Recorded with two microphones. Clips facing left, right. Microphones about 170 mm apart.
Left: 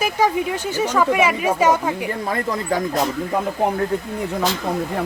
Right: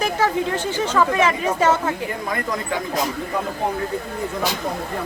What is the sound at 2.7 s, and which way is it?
Speech, 40° left (ahead or behind).